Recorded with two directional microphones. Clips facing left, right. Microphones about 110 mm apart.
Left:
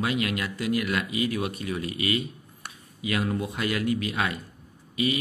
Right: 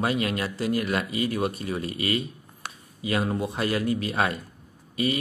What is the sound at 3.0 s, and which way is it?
A man's voice, 30° right (ahead or behind).